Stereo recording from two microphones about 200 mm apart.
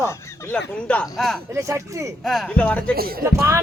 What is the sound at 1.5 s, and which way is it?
Speech, 15° right (ahead or behind).